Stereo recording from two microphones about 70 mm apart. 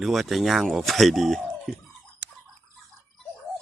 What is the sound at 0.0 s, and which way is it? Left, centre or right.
Speech, centre.